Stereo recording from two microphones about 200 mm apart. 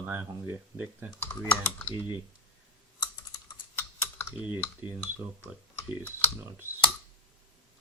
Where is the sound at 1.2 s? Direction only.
5° left (ahead or behind).